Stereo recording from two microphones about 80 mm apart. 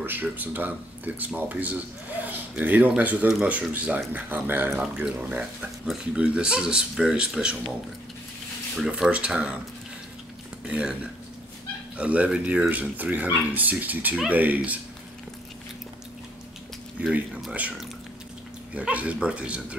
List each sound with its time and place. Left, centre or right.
0.0 s speech: right
8.7 s speech: centre
10.6 s speech: centre
12.0 s speech: centre
17.0 s speech: centre